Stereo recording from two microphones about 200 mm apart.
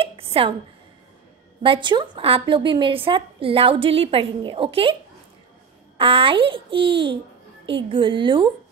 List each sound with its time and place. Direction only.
0.0 s a sound: 25° right (ahead or behind)
1.6 s a woman's voice: 25° right (ahead or behind)
5.9 s a woman's voice: 25° right (ahead or behind)